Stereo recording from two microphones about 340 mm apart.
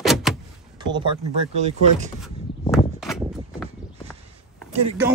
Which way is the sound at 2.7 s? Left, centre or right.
Centre.